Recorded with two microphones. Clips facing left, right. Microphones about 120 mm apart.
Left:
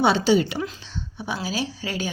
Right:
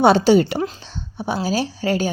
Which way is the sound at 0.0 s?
45° right (ahead or behind).